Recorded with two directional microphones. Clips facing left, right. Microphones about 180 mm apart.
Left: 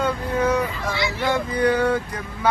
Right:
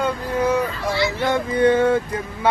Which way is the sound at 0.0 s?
10° right (ahead or behind).